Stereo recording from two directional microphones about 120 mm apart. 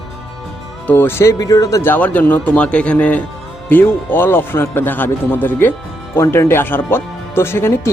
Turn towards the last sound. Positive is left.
turn(degrees=20)  # may be behind; listen again after turning